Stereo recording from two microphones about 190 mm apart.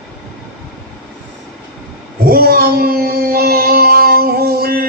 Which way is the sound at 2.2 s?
50° right (ahead or behind).